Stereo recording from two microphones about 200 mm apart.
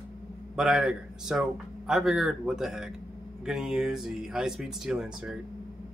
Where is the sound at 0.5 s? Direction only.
5° right (ahead or behind).